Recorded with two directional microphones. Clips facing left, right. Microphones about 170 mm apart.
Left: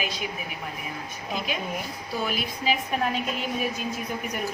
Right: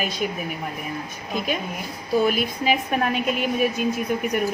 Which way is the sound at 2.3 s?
60° right (ahead or behind).